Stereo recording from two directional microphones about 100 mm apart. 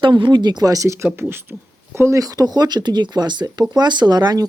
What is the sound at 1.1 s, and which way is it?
Speech, 20° right (ahead or behind).